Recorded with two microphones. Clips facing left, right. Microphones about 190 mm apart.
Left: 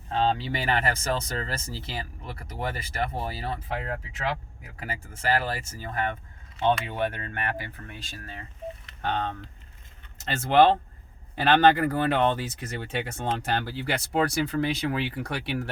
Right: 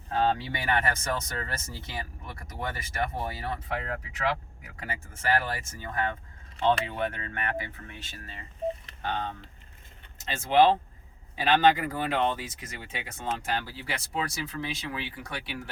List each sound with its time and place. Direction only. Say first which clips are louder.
0.1 s speech: left 1 dB; 25° left (ahead or behind)
9.0 s speech: left 3 dB; 70° left (ahead or behind)